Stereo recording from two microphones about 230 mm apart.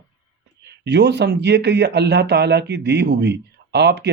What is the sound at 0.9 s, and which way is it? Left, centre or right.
Speech, right.